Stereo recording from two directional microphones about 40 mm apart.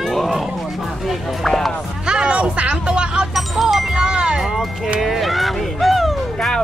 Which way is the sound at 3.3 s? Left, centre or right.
Centre.